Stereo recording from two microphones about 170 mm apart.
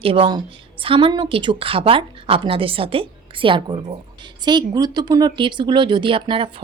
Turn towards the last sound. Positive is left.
turn(degrees=-30)  # may be behind; listen again after turning